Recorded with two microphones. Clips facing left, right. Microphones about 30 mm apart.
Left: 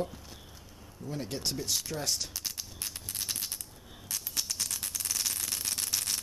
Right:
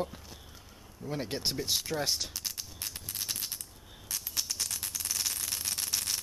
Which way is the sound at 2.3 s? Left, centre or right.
Centre.